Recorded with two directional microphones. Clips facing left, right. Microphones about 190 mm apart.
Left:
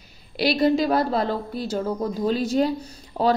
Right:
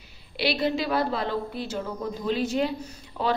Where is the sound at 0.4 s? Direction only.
40° left (ahead or behind).